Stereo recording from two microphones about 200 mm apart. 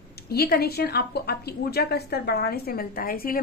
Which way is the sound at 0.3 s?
50° left (ahead or behind).